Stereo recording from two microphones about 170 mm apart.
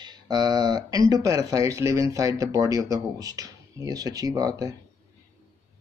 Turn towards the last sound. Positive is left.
turn(degrees=-20)  # may be behind; listen again after turning